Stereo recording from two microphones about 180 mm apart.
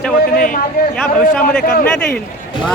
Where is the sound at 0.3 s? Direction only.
50° left (ahead or behind).